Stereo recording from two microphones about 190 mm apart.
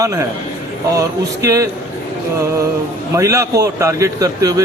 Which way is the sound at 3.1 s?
15° right (ahead or behind).